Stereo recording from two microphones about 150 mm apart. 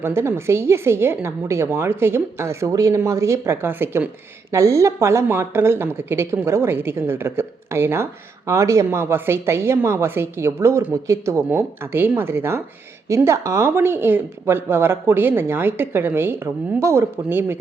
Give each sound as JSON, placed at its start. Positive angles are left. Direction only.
{"t": 0.0, "sound": "speech", "side_deg": -15}